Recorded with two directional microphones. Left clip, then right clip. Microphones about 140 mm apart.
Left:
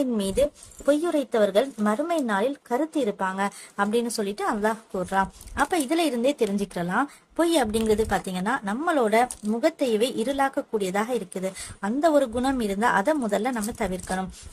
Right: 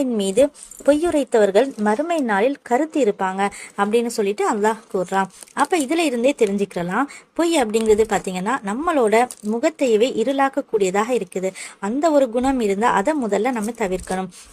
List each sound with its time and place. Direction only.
0.0 s speech: 20° right (ahead or behind)